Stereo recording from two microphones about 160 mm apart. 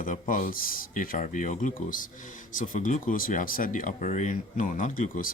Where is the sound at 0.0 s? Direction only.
55° left (ahead or behind).